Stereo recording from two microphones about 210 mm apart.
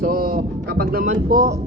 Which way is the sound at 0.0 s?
45° right (ahead or behind).